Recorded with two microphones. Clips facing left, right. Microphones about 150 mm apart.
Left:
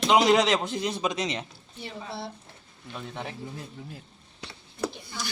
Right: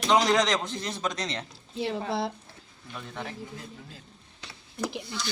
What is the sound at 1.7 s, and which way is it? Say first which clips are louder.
Speech: right 8 dB; 90° right.